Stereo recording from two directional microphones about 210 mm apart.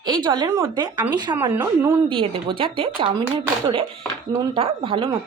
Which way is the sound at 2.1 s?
25° right (ahead or behind).